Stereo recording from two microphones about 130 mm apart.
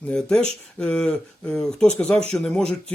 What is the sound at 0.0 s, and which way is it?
Speech, 5° left (ahead or behind).